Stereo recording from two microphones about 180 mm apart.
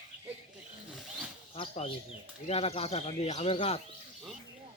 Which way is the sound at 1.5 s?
35° left (ahead or behind).